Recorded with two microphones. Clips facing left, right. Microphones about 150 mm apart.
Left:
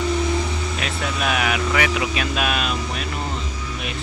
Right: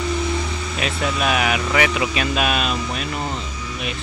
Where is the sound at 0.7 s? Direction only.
5° right (ahead or behind).